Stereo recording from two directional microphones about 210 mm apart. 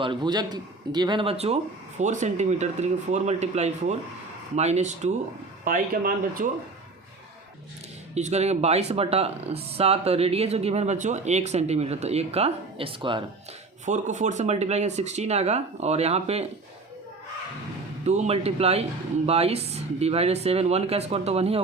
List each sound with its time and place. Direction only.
0.0 s speech: 20° right (ahead or behind); by 6.5 s 45° right (ahead or behind)
8.1 s speech: 30° right (ahead or behind)
13.8 s speech: 35° right (ahead or behind)
18.0 s speech: 30° right (ahead or behind)